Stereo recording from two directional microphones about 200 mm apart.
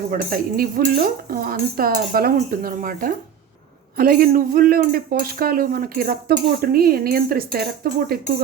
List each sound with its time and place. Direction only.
0.1 s speech: 45° right (ahead or behind)